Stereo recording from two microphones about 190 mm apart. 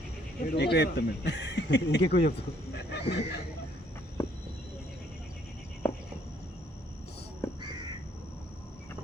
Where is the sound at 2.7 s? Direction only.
60° left (ahead or behind).